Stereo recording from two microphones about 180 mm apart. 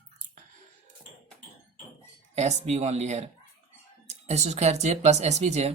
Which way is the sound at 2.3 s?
40° right (ahead or behind).